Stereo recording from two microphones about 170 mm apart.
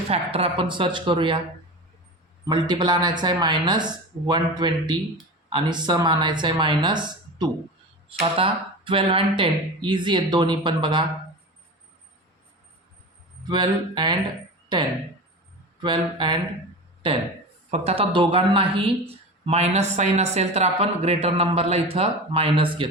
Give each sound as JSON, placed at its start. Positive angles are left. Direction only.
{"t": 0.1, "sound": "speech", "side_deg": -35}
{"t": 2.5, "sound": "speech", "side_deg": -25}
{"t": 13.5, "sound": "a woman's voice", "side_deg": -25}